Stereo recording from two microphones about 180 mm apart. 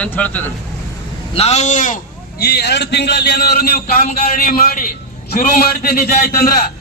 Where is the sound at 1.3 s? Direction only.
35° left (ahead or behind).